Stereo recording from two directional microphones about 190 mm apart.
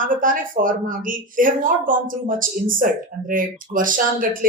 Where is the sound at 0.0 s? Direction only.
45° right (ahead or behind).